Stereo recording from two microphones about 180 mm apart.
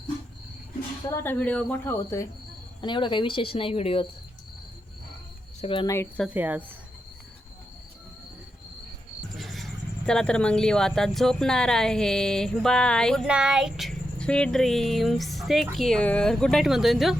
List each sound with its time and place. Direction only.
1.1 s speech: 10° left (ahead or behind)
2.8 s speech: 25° left (ahead or behind)
5.5 s speech: 30° left (ahead or behind)
5.9 s speech: 15° left (ahead or behind)
6.2 s speech: 10° right (ahead or behind)
9.4 s speech: centre (ahead or behind)